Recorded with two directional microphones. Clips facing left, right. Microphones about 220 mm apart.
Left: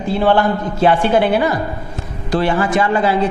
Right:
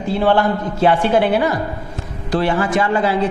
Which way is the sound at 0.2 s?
15° left (ahead or behind).